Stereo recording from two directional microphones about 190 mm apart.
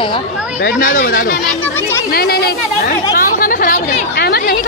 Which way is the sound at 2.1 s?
55° left (ahead or behind).